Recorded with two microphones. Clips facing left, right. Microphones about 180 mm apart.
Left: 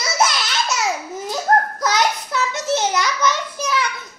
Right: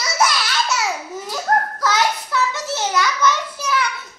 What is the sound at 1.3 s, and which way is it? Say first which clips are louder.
Child singing: left 2 dB; 20° left (ahead or behind).